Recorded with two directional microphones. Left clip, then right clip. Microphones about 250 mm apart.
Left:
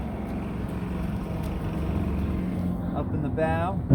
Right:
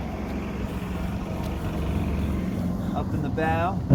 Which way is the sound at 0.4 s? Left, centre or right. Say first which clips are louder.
Right 1 dB; left.